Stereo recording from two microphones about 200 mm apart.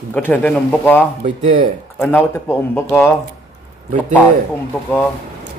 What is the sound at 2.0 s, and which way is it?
Speech, 10° left (ahead or behind).